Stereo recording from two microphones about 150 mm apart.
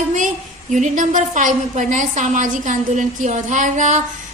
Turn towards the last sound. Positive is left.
turn(degrees=-55)  # may be behind; listen again after turning